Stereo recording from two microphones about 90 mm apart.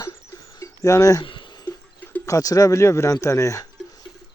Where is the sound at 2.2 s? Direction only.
40° left (ahead or behind).